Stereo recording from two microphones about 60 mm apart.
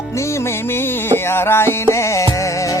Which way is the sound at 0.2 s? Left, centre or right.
Left.